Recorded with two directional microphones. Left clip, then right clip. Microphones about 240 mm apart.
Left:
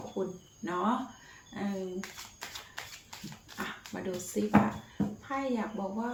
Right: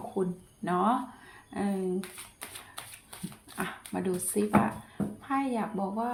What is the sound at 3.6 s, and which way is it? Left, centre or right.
A woman's voice, right.